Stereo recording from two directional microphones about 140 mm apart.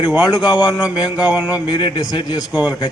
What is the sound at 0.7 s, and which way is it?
Mantra, 10° right (ahead or behind).